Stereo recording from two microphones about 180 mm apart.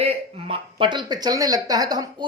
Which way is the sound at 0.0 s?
35° right (ahead or behind).